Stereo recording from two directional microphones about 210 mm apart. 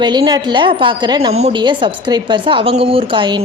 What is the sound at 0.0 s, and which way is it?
A woman's voice, 20° right (ahead or behind).